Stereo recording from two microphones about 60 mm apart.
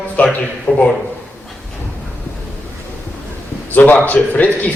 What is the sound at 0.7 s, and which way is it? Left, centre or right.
Speech, left.